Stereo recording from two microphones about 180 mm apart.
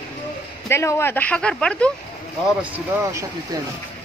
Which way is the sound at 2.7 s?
15° right (ahead or behind).